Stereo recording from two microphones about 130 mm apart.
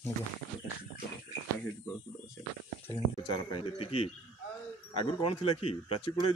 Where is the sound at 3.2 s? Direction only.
45° left (ahead or behind).